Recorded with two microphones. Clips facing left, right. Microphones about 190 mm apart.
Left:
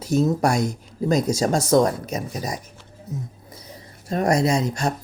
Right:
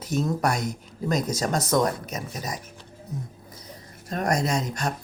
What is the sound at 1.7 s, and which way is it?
Speech, 30° left (ahead or behind).